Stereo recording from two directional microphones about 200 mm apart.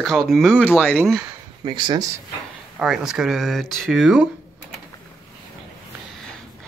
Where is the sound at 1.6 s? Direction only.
25° right (ahead or behind).